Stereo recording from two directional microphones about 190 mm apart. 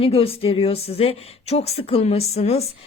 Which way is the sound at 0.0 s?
30° left (ahead or behind).